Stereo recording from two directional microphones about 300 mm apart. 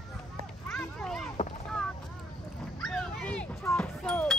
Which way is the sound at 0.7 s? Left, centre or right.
Centre.